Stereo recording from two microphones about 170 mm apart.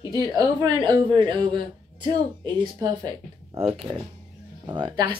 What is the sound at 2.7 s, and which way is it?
Speech, 25° right (ahead or behind).